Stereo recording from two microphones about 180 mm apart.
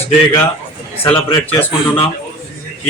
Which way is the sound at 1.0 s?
10° left (ahead or behind).